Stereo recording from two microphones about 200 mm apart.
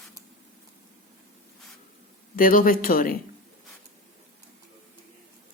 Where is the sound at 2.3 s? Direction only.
45° left (ahead or behind).